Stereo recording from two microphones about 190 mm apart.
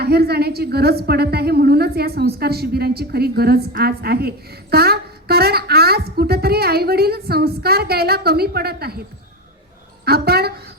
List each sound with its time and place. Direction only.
0.0 s a woman's voice: 55° right (ahead or behind)
10.1 s a woman's voice: 55° right (ahead or behind)